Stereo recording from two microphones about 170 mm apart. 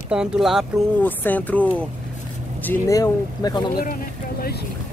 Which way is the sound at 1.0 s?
10° left (ahead or behind).